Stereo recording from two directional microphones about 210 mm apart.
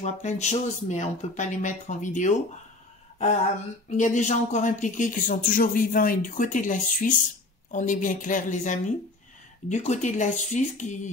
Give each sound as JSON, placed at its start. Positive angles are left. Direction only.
{"t": 0.0, "sound": "speech", "side_deg": 35}
{"t": 3.9, "sound": "speech", "side_deg": 35}